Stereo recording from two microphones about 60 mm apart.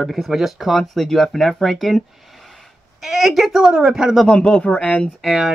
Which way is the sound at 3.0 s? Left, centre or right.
Centre.